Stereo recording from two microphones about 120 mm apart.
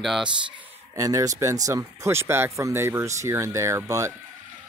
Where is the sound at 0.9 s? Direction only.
30° right (ahead or behind).